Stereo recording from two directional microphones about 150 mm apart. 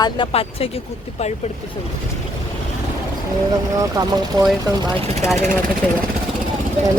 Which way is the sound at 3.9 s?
25° right (ahead or behind).